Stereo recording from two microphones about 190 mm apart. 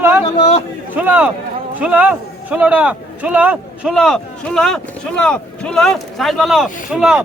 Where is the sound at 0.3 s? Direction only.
35° left (ahead or behind).